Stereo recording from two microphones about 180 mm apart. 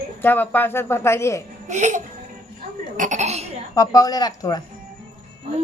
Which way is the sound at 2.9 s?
45° right (ahead or behind).